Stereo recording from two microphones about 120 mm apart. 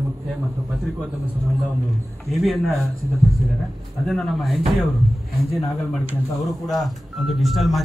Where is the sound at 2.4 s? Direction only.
Centre (ahead or behind).